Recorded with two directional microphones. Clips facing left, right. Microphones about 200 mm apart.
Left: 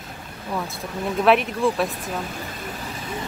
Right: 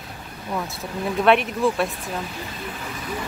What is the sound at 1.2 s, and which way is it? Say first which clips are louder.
Speech: even; centre (ahead or behind).